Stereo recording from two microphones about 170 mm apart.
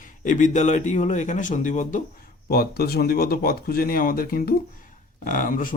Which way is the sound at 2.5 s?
65° left (ahead or behind).